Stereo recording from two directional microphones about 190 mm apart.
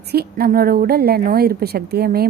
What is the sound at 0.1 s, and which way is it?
A woman's voice, 55° right (ahead or behind).